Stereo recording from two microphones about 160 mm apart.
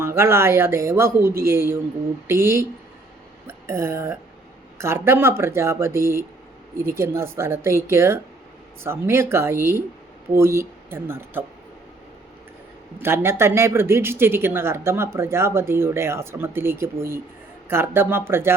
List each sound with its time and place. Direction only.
0.0 s a woman's voice: 15° right (ahead or behind)
13.0 s a woman's voice: 15° right (ahead or behind)